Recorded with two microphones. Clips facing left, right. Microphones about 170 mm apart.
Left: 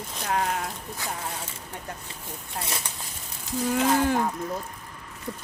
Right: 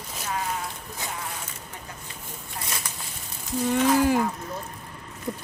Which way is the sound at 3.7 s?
5° right (ahead or behind).